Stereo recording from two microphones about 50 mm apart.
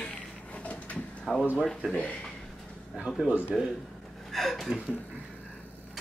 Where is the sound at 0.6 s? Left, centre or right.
Left.